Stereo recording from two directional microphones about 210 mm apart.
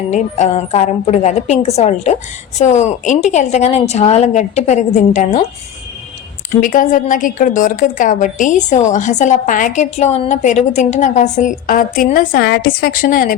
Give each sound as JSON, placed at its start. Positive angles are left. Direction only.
{"t": 0.1, "sound": "a woman's voice", "side_deg": 35}
{"t": 6.6, "sound": "a woman's voice", "side_deg": 40}